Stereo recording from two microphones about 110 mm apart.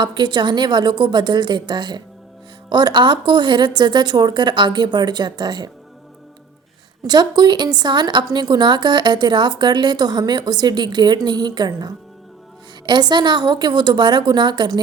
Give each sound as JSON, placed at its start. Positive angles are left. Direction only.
{"t": 0.0, "sound": "a woman's voice", "side_deg": -45}
{"t": 7.1, "sound": "a woman's voice", "side_deg": -40}